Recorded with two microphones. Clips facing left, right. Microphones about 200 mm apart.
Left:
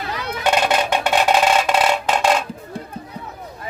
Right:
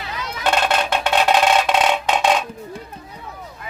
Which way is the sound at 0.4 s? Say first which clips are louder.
Left 1 dB; 10° left (ahead or behind).